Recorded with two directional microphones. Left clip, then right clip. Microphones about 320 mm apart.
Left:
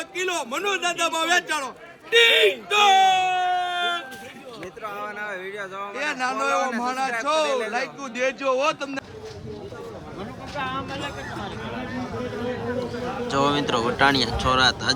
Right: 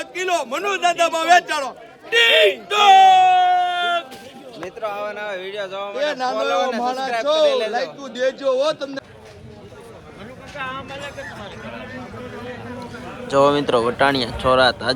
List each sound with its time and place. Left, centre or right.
0.0 s a man's voice: centre
6.4 s a man's voice: centre
10.5 s vehicle: left
13.3 s speech: centre